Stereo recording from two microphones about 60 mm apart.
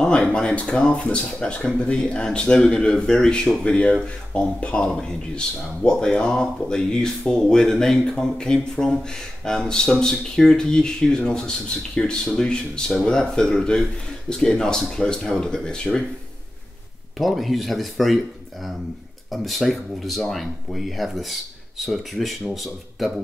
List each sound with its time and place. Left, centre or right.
0.2 s speech: centre
17.2 s speech: centre
19.3 s speech: centre